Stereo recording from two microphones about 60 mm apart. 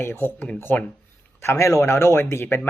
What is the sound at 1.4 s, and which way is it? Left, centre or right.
Speech, left.